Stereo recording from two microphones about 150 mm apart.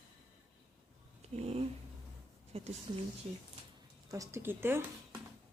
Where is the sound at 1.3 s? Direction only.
45° right (ahead or behind).